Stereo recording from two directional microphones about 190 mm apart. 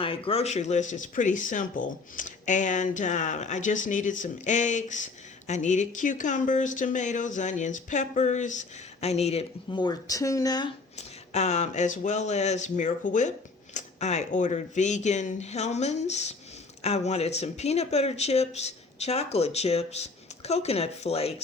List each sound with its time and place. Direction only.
0.0 s speech: 30° left (ahead or behind)
10.9 s speech: 35° left (ahead or behind)